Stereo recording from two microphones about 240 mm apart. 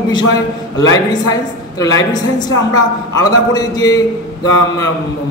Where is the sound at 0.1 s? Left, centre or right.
Centre.